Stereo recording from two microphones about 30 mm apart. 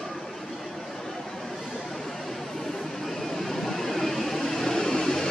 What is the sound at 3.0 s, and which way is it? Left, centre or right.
Vehicle, centre.